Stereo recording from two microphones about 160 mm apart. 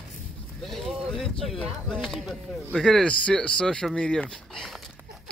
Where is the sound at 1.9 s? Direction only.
Centre (ahead or behind).